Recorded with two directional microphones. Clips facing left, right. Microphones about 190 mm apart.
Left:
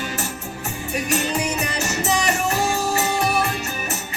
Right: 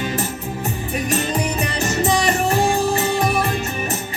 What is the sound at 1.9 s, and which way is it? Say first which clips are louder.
Music: right 4 dB; 35° right (ahead or behind).